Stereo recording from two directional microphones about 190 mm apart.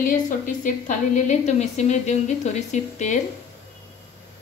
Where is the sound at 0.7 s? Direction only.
40° left (ahead or behind).